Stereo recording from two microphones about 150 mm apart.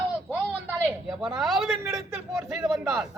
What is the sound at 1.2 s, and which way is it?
Speech, centre (ahead or behind).